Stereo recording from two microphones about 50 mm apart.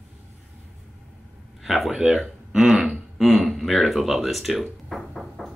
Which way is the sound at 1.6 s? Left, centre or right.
Centre.